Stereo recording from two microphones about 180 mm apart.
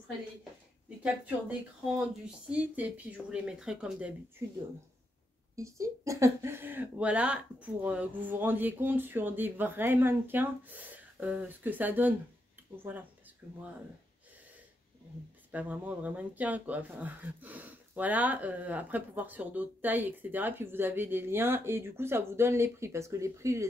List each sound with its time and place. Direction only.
0.4 s a sound: 5° right (ahead or behind)
2.5 s speech: 10° right (ahead or behind)
5.6 s speech: 15° right (ahead or behind)
15.5 s speech: 10° right (ahead or behind)